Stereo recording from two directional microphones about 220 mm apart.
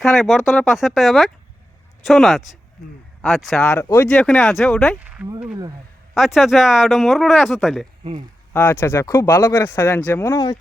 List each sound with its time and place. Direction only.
0.0 s speech: centre (ahead or behind)
3.6 s speech: 10° left (ahead or behind)
4.9 s speech: 5° right (ahead or behind)
8.5 s speech: 10° left (ahead or behind)